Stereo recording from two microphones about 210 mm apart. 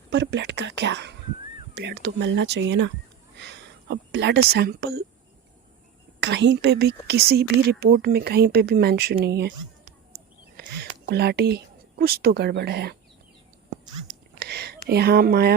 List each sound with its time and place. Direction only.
0.1 s speech: 55° right (ahead or behind)
6.1 s a woman's voice: 55° right (ahead or behind)
10.6 s speech: 50° right (ahead or behind)
14.1 s a sound: 50° right (ahead or behind)